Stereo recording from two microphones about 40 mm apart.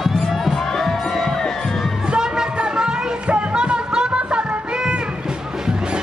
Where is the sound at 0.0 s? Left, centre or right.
Centre.